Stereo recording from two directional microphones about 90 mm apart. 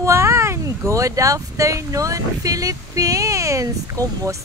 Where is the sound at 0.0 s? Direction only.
30° right (ahead or behind).